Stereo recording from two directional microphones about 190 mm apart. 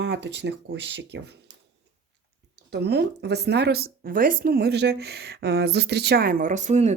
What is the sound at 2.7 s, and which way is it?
Speech, 60° right (ahead or behind).